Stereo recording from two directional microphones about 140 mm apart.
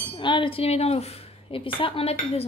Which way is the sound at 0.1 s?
35° left (ahead or behind).